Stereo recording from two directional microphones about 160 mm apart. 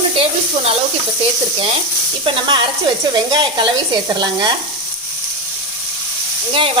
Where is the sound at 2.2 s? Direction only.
30° right (ahead or behind).